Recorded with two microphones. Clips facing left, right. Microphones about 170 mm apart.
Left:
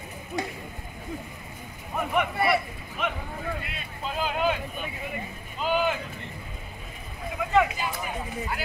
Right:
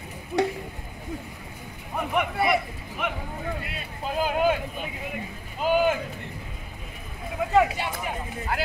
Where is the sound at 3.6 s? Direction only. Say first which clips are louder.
Right 2 dB; 40° right (ahead or behind).